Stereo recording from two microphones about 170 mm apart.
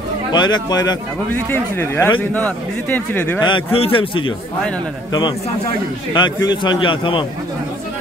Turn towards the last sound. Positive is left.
turn(degrees=30)  # may be behind; listen again after turning